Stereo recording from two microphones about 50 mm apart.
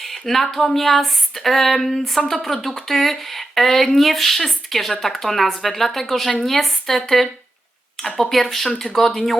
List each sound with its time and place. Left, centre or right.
0.0 s speech: centre
8.3 s speech: centre